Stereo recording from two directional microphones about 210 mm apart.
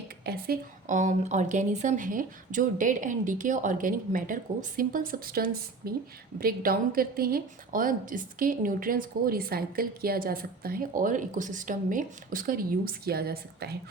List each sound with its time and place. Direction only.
0.3 s a woman's voice: 45° right (ahead or behind)